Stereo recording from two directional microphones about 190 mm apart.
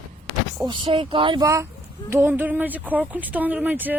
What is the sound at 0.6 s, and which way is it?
A woman's voice, 25° right (ahead or behind).